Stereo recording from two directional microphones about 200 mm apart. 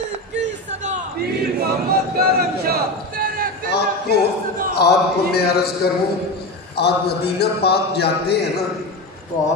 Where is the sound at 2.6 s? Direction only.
45° right (ahead or behind).